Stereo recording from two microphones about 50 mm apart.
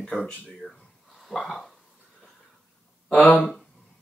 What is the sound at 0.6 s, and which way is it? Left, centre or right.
Speech, centre.